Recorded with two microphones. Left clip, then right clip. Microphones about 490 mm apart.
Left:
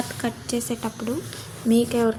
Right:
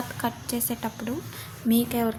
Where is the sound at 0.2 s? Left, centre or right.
Right.